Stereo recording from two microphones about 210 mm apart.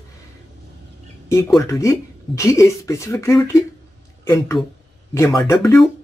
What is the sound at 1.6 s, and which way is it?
Speech, 15° left (ahead or behind).